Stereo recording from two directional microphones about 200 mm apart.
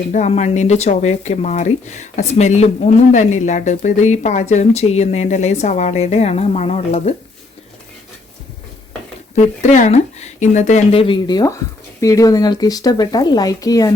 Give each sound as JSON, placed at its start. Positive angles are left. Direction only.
{"t": 0.1, "sound": "speech", "side_deg": 35}
{"t": 9.3, "sound": "speech", "side_deg": 35}